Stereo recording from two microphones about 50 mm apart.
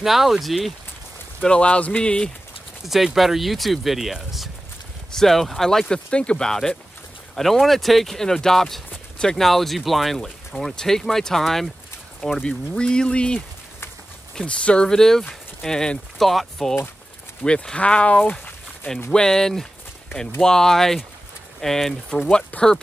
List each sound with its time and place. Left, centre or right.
0.0 s speech: centre
1.4 s speech: left
2.8 s speech: centre
5.1 s speech: centre
6.0 s speech: left
9.5 s speech: centre
12.4 s speech: centre
14.9 s speech: centre
16.2 s speech: centre
17.4 s speech: left
19.1 s speech: centre
22.5 s speech: left